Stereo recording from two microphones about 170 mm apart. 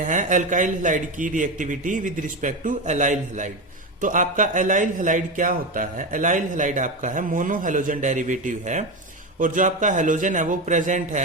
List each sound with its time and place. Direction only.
0.0 s a man's voice: 50° right (ahead or behind)